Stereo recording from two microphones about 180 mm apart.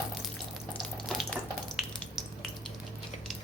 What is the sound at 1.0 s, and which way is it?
Water, centre (ahead or behind).